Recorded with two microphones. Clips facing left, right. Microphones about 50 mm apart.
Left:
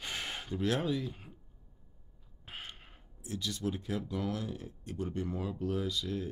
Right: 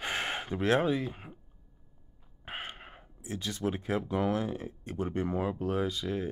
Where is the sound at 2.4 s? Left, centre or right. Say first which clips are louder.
Right 6 dB; right.